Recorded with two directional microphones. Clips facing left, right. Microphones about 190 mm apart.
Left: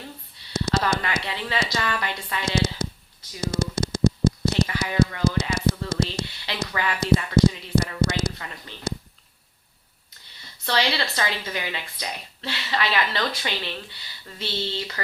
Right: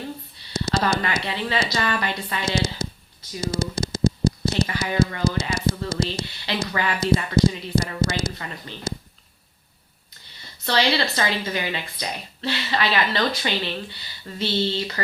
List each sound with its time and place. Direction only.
0.5 s speech: 30° right (ahead or behind)
10.9 s speech: 30° right (ahead or behind)